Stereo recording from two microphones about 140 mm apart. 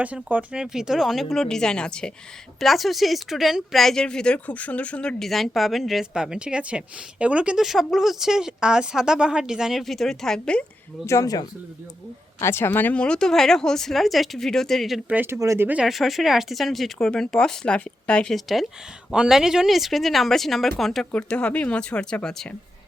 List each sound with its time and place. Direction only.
0.0 s speech: 10° right (ahead or behind); by 10.6 s 5° left (ahead or behind)
11.0 s speech: 20° left (ahead or behind); by 15.0 s centre (ahead or behind)
15.1 s speech: 15° right (ahead or behind); by 22.4 s 5° left (ahead or behind)